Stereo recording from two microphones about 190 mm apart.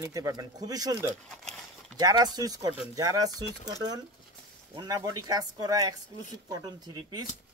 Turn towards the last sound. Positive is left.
turn(degrees=-20)  # may be behind; listen again after turning